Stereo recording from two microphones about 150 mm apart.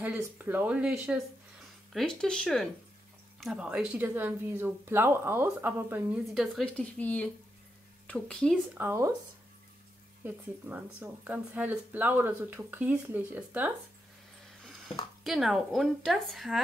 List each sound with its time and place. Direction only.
0.0 s speech: 15° right (ahead or behind)
1.9 s a woman's voice: 5° left (ahead or behind); by 6.2 s 15° right (ahead or behind)
6.3 s speech: centre (ahead or behind)
8.7 s speech: 15° right (ahead or behind)
10.2 s speech: 10° right (ahead or behind)
15.2 s a woman's voice: centre (ahead or behind)